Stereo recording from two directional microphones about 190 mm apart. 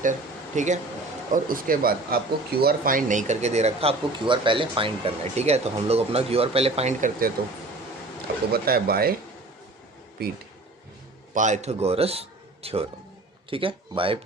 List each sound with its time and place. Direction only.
0.0 s speech: 40° right (ahead or behind)
8.5 s speech: 50° right (ahead or behind)
10.2 s speech: 55° right (ahead or behind)
11.3 s speech: 40° right (ahead or behind)